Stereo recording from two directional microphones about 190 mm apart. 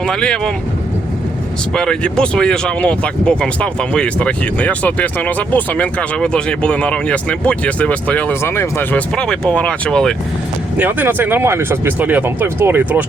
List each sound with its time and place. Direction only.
0.1 s speech: 5° left (ahead or behind)
1.7 s speech: 5° left (ahead or behind)
10.8 s speech: 10° right (ahead or behind)